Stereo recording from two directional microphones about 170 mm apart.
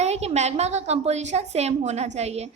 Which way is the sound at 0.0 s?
40° right (ahead or behind).